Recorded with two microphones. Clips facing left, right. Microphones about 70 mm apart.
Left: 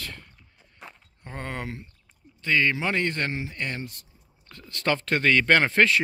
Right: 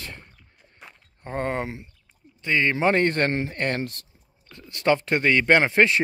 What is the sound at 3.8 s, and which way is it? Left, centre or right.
Speech, right.